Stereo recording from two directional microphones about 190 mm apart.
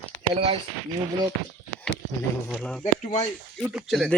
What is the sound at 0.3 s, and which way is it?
Speech, 30° right (ahead or behind).